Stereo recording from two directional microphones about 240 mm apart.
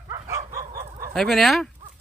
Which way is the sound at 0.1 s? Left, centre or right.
Centre.